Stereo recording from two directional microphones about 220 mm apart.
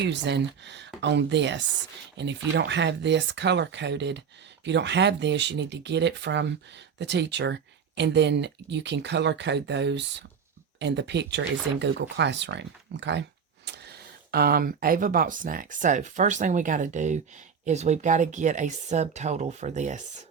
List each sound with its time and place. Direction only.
0.0 s speech: 50° right (ahead or behind); by 20.2 s 35° right (ahead or behind)